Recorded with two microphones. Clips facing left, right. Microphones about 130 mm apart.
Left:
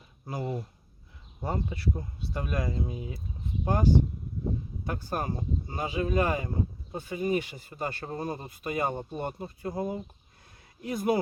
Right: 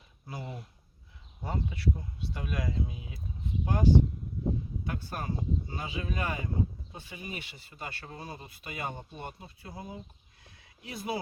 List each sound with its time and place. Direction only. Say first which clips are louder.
0.3 s speech: left 8 dB; 45° left (ahead or behind)